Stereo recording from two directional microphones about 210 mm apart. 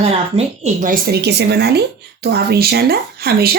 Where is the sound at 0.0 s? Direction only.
30° right (ahead or behind).